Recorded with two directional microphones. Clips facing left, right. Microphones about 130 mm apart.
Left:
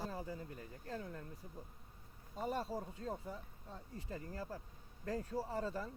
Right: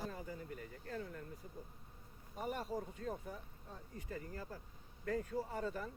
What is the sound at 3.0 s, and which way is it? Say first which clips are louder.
Speech: even; 25° left (ahead or behind).